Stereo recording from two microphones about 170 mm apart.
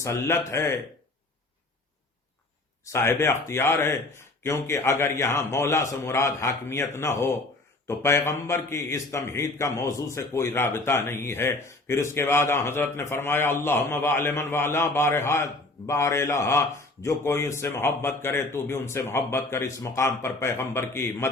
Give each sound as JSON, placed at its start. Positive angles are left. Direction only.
{"t": 0.0, "sound": "a man's voice", "side_deg": 15}
{"t": 2.9, "sound": "a man's voice", "side_deg": 15}